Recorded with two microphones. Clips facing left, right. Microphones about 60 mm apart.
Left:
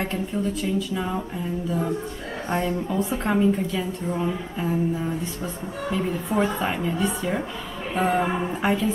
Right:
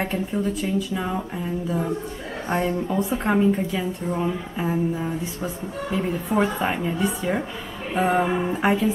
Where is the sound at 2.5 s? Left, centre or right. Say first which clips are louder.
Right 2 dB; centre.